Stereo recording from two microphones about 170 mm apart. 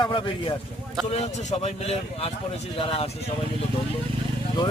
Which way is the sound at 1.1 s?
40° left (ahead or behind).